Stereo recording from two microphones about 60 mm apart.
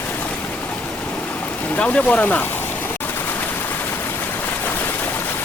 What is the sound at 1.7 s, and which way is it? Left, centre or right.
Speech, left.